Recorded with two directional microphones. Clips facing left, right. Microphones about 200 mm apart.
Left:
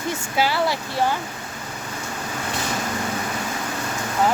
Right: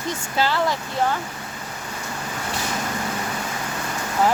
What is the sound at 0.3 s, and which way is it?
Speech, 10° left (ahead or behind).